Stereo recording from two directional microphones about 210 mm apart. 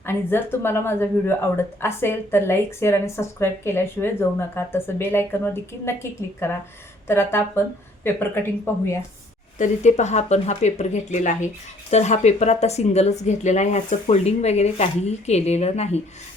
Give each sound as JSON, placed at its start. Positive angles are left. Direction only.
{"t": 0.0, "sound": "a woman's voice", "side_deg": 10}
{"t": 8.6, "sound": "a woman's voice", "side_deg": 15}
{"t": 9.6, "sound": "speech", "side_deg": 35}